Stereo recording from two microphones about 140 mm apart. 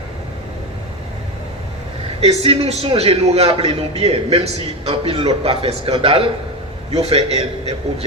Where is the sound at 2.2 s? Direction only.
45° right (ahead or behind).